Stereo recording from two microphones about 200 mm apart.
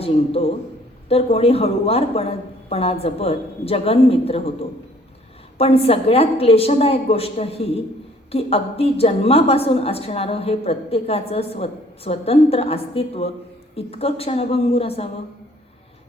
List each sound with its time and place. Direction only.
0.0 s a woman's voice: 30° left (ahead or behind)
5.5 s a woman's voice: 30° left (ahead or behind)